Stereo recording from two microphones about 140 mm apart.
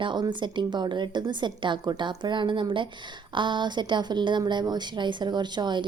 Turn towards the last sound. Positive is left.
turn(degrees=-35)  # may be behind; listen again after turning